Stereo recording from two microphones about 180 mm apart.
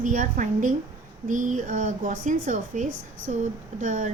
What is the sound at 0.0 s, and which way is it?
A woman's voice, 45° right (ahead or behind).